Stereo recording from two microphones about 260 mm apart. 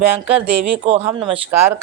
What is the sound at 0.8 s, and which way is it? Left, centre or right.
Speech, right.